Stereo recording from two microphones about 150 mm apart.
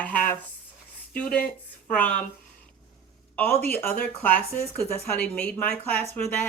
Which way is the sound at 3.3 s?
15° left (ahead or behind).